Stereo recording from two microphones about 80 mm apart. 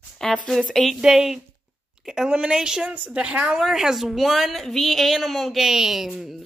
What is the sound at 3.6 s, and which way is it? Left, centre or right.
Speech, centre.